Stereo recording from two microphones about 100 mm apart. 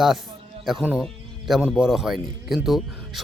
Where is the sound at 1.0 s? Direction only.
5° right (ahead or behind).